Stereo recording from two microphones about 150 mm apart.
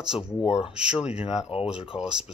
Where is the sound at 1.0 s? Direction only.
40° left (ahead or behind).